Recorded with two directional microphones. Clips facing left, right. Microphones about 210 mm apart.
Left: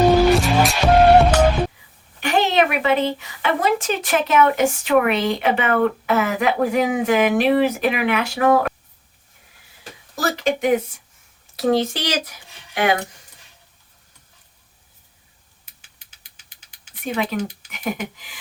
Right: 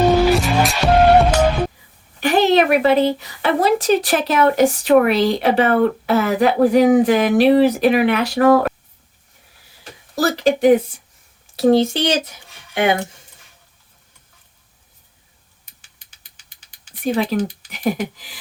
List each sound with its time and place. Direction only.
0.0 s music: centre (ahead or behind)
2.2 s a woman's voice: 35° right (ahead or behind)
10.2 s a woman's voice: 35° right (ahead or behind)
15.6 s a sound: 5° left (ahead or behind)
17.0 s a woman's voice: 35° right (ahead or behind)